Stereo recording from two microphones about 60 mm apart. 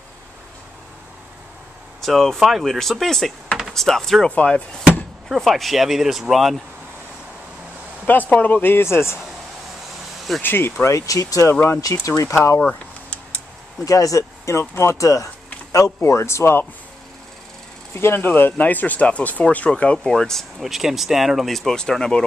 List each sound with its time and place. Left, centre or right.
2.0 s speech: centre
4.4 s speech: left
5.3 s speech: centre
8.0 s speech: left
10.4 s speech: left
11.0 s speech: left
12.5 s a sound: centre
13.8 s speech: left
15.0 s speech: left
17.9 s speech: left
20.0 s speech: centre
20.6 s speech: centre